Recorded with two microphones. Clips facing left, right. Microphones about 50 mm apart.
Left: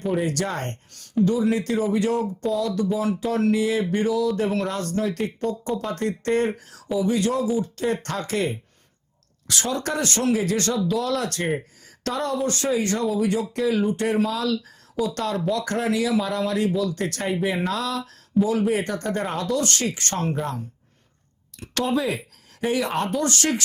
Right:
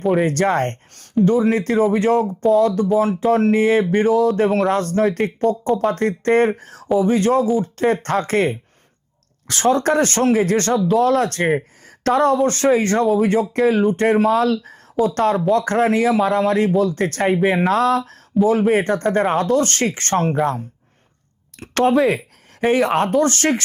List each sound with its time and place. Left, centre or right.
0.0 s speech: centre
0.3 s speech: right
14.2 s speech: right
21.6 s speech: right